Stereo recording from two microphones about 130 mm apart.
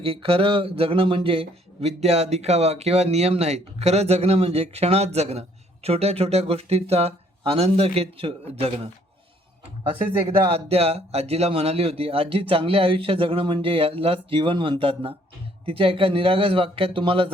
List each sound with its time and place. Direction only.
0.0 s speech: 45° right (ahead or behind)
10.1 s speech: 50° right (ahead or behind)